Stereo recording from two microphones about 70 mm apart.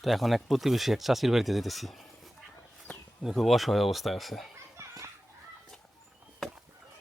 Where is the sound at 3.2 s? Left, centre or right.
Centre.